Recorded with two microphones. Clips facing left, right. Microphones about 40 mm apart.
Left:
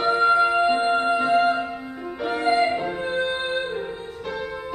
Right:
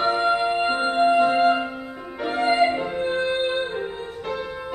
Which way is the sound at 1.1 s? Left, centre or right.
Centre.